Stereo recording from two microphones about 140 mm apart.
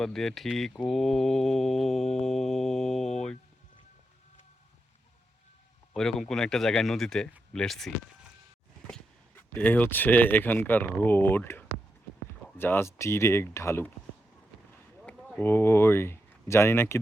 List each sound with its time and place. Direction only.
0.0 s speech: 5° left (ahead or behind)
0.9 s mantra: centre (ahead or behind)
5.9 s speech: 5° left (ahead or behind)
9.5 s speech: 10° left (ahead or behind)
15.0 s speech: 10° left (ahead or behind)